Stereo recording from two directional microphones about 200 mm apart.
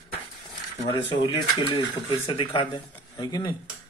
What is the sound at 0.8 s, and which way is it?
Speech, 25° left (ahead or behind).